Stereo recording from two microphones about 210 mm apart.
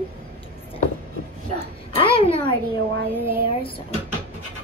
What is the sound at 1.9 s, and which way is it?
Speech, 25° left (ahead or behind).